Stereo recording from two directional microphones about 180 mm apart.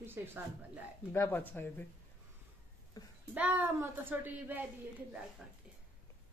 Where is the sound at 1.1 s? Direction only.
10° left (ahead or behind).